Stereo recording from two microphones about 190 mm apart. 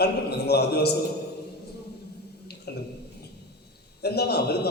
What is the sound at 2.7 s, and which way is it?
Speech, 55° left (ahead or behind).